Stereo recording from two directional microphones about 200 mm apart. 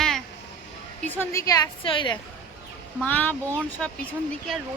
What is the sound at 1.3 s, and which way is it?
Speech, 20° left (ahead or behind).